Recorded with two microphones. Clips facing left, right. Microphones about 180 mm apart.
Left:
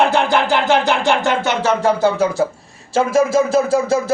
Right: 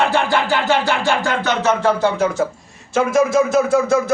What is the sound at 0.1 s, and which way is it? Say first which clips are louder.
Music: left 2 dB; 15° left (ahead or behind).